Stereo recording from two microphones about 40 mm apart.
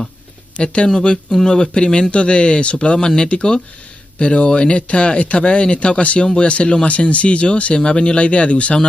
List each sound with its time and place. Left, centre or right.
0.8 s speech: centre